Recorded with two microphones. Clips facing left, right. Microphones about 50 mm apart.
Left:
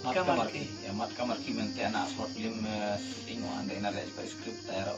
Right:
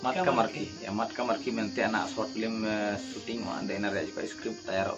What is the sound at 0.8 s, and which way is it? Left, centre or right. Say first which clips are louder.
Speech: right 4 dB; right.